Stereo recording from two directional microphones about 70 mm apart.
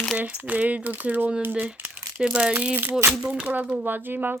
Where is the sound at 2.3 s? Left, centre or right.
Centre.